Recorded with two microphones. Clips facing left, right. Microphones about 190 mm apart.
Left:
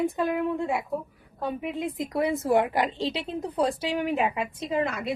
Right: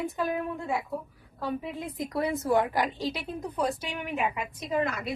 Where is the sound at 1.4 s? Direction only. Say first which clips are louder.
Left 3 dB; 20° left (ahead or behind).